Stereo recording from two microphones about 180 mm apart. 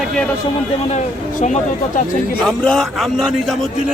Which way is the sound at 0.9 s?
40° left (ahead or behind).